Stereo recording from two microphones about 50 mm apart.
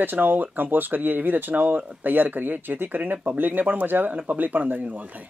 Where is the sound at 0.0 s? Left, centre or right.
Right.